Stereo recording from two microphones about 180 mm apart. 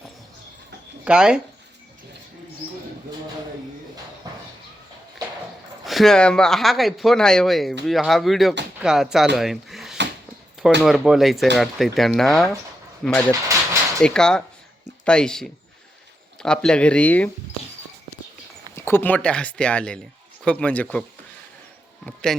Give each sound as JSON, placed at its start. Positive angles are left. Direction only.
{"t": 1.0, "sound": "speech", "side_deg": -5}
{"t": 5.8, "sound": "speech", "side_deg": 0}
{"t": 9.3, "sound": "a sound", "side_deg": 0}
{"t": 10.8, "sound": "speech", "side_deg": 0}
{"t": 18.7, "sound": "speech", "side_deg": 15}
{"t": 22.0, "sound": "speech", "side_deg": 5}